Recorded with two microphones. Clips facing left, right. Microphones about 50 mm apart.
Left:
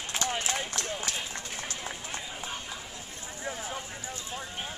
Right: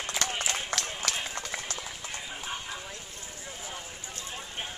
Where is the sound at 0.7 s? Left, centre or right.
Right.